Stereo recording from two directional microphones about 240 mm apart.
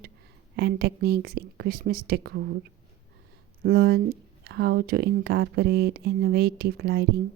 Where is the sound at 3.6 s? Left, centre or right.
Right.